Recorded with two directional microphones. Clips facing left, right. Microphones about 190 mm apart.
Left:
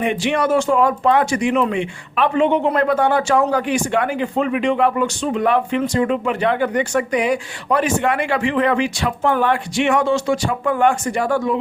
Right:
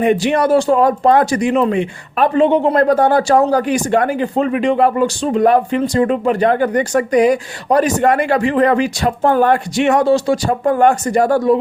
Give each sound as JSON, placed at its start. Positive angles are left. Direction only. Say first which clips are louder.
{"t": 0.0, "sound": "speech", "louder": "right 5 dB", "side_deg": -40}